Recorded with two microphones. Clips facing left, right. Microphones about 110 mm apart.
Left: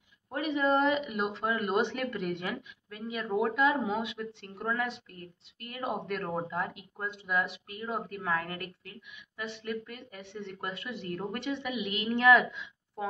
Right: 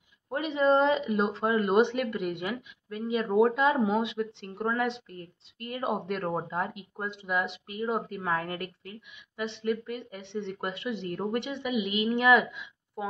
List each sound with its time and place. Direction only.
0.3 s speech: 25° right (ahead or behind)
3.1 s speech: 25° right (ahead or behind)